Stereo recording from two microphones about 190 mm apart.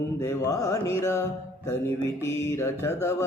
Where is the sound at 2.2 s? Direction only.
15° left (ahead or behind).